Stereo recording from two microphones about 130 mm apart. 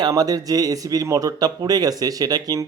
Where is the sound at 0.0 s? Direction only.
30° right (ahead or behind).